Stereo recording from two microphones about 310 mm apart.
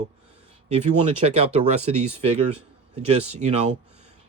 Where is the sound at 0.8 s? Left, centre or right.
Centre.